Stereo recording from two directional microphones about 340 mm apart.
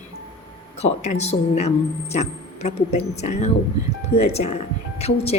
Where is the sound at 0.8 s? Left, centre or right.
Centre.